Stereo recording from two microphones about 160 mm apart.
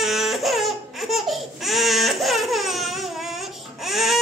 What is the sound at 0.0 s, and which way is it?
Baby cry, centre (ahead or behind).